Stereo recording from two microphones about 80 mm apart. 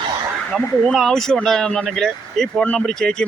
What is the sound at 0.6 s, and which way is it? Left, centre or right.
Speech, left.